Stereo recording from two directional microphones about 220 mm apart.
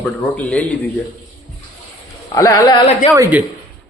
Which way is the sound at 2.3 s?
15° left (ahead or behind).